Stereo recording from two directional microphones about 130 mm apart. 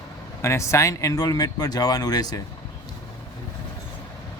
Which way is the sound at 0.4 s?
20° left (ahead or behind).